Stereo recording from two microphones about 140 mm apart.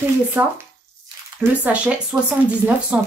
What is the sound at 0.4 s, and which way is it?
Speech, 10° right (ahead or behind).